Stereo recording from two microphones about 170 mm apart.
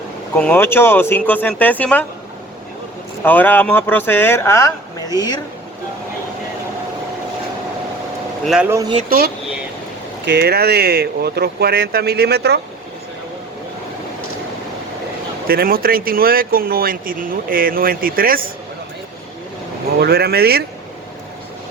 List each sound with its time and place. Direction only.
0.3 s speech: 10° left (ahead or behind)
3.2 s speech: 10° left (ahead or behind)
8.4 s speech: 5° right (ahead or behind)
8.7 s speech: 20° right (ahead or behind)
9.0 s speech: 60° right (ahead or behind)
15.4 s speech: 60° right (ahead or behind)
20.0 s speech: 65° right (ahead or behind)